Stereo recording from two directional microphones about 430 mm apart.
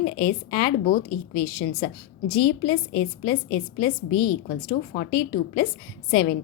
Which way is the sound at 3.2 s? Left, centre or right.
Centre.